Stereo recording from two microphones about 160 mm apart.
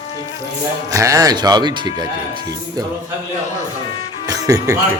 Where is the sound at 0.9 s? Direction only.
20° right (ahead or behind).